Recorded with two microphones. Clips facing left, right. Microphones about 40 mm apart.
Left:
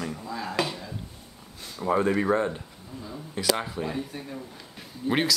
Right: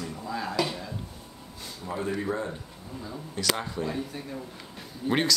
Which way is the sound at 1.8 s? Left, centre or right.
Left.